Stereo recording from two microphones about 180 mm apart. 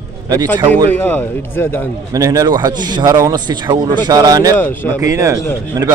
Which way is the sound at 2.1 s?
20° right (ahead or behind).